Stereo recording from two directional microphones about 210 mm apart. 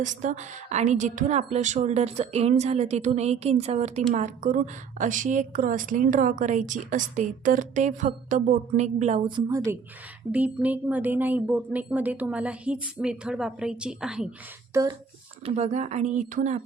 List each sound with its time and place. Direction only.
0.0 s a woman's voice: 35° right (ahead or behind)
9.3 s speech: 15° right (ahead or behind)
14.7 s speech: 15° right (ahead or behind)
15.4 s a woman's voice: 30° right (ahead or behind)